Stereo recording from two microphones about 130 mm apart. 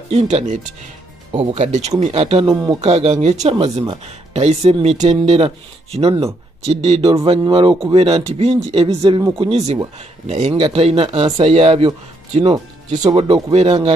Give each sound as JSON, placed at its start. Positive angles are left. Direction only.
{"t": 0.1, "sound": "speech", "side_deg": -55}
{"t": 2.5, "sound": "speech", "side_deg": -30}
{"t": 2.8, "sound": "speech", "side_deg": -60}
{"t": 3.5, "sound": "speech", "side_deg": -50}
{"t": 7.2, "sound": "speech", "side_deg": -40}
{"t": 10.5, "sound": "speech", "side_deg": -45}
{"t": 12.9, "sound": "speech", "side_deg": -60}
{"t": 13.2, "sound": "speech", "side_deg": -45}